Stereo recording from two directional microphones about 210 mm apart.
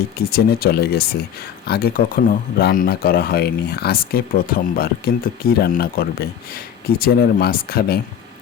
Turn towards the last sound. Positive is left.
turn(degrees=45)  # may be behind; listen again after turning